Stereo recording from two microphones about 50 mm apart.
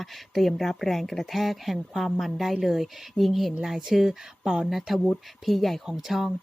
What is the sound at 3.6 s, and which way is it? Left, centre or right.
Speech, centre.